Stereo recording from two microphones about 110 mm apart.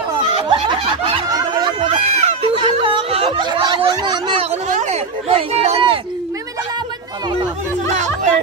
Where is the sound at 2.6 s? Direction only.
50° right (ahead or behind).